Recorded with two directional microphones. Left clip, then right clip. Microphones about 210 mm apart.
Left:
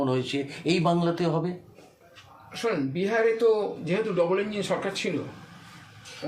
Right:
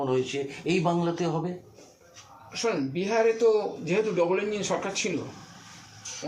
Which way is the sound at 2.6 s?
15° left (ahead or behind).